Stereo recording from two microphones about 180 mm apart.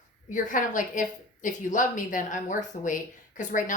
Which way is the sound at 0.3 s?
45° left (ahead or behind).